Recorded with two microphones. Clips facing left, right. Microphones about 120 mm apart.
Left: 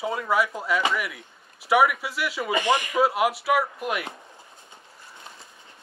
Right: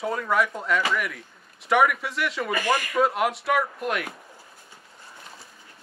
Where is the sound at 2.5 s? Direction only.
20° left (ahead or behind).